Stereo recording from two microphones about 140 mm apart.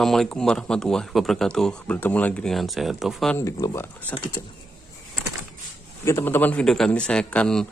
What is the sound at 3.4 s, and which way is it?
Speech, 25° left (ahead or behind).